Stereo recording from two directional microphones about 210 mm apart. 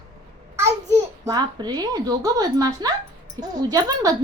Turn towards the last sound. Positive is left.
turn(degrees=-15)  # may be behind; listen again after turning